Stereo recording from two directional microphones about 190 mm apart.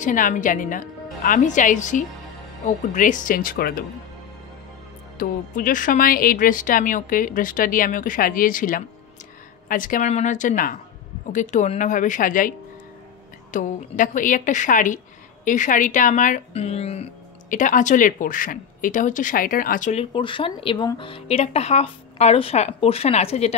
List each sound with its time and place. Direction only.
0.0 s a woman's voice: 45° left (ahead or behind)
5.1 s a woman's voice: 45° left (ahead or behind)